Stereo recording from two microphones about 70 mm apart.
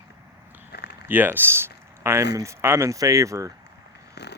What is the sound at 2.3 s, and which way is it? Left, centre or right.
Speech, right.